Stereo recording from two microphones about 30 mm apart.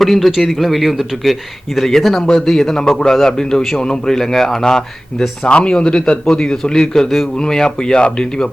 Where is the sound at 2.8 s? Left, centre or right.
Left.